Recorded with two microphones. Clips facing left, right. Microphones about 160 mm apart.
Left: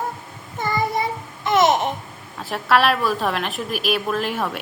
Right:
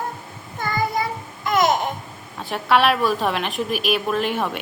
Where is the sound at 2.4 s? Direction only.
Centre (ahead or behind).